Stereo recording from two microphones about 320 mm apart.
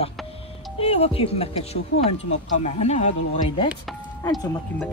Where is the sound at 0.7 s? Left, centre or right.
Centre.